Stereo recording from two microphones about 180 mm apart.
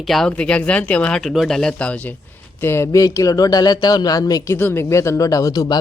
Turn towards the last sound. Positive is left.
turn(degrees=20)  # may be behind; listen again after turning